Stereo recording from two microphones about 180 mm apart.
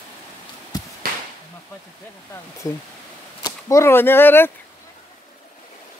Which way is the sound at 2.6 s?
20° left (ahead or behind).